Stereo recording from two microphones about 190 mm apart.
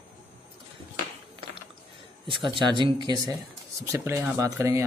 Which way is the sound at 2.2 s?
25° right (ahead or behind).